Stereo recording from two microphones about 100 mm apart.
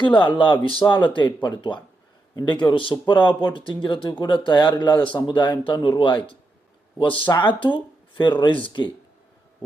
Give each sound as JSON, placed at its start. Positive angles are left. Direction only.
{"t": 0.0, "sound": "speech", "side_deg": 50}